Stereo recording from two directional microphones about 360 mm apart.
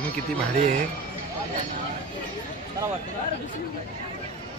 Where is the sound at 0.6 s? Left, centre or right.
Right.